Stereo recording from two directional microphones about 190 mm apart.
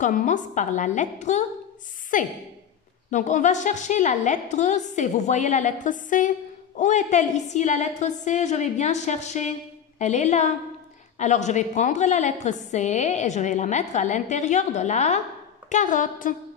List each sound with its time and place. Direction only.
0.0 s a woman's voice: 40° left (ahead or behind)